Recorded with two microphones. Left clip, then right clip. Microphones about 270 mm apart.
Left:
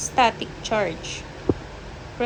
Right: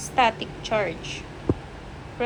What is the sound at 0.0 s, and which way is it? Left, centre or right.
A woman's voice, centre.